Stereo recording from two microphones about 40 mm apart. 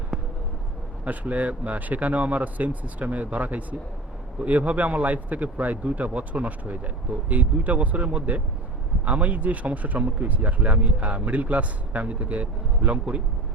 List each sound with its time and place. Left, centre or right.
1.0 s speech: right